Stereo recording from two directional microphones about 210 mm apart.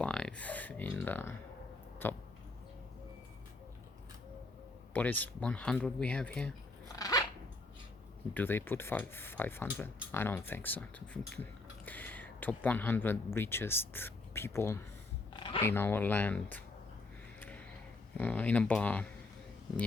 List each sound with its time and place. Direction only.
0.0 s a sound: 5° left (ahead or behind)
2.0 s speech: 10° left (ahead or behind)
4.9 s speech: 10° left (ahead or behind)
6.8 s dog: 15° left (ahead or behind)
8.3 s speech: 10° left (ahead or behind)
15.3 s a sound: 25° left (ahead or behind)
15.6 s speech: 10° left (ahead or behind)
18.2 s speech: 5° left (ahead or behind)